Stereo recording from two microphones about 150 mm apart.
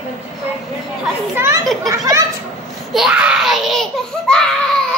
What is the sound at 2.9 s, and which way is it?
Laughter, 5° right (ahead or behind).